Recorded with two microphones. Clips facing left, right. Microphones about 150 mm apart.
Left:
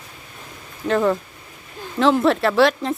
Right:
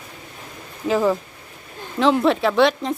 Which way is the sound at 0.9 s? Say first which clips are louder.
Even; 5° right (ahead or behind).